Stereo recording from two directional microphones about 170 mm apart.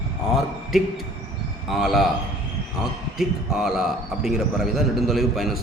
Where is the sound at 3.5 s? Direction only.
Centre (ahead or behind).